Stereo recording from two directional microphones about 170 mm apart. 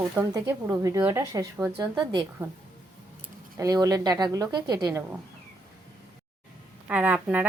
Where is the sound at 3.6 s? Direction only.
20° right (ahead or behind).